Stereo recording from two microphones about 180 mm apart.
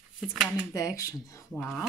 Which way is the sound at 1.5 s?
5° left (ahead or behind).